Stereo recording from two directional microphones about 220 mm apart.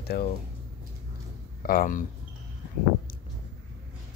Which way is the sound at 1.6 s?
40° left (ahead or behind).